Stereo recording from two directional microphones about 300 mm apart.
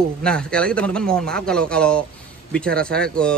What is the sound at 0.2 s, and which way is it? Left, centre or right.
Speech, centre.